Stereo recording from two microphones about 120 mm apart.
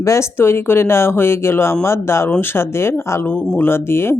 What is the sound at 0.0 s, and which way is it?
Speech, 25° left (ahead or behind).